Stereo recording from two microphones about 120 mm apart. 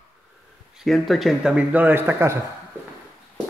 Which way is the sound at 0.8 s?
Centre (ahead or behind).